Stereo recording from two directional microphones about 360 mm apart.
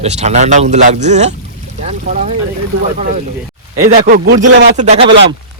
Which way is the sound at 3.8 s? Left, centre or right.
Right.